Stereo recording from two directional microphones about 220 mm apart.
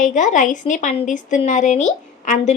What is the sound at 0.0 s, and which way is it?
A woman's voice, 35° left (ahead or behind).